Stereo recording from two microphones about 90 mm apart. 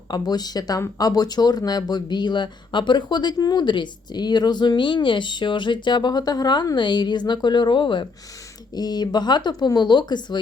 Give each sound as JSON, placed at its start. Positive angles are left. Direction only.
{"t": 0.1, "sound": "speech", "side_deg": 50}
{"t": 8.7, "sound": "speech", "side_deg": 50}